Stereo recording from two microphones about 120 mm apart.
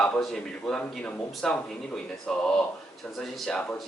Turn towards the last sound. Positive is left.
turn(degrees=5)  # may be behind; listen again after turning